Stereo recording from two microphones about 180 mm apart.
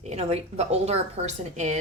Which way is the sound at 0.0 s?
35° right (ahead or behind).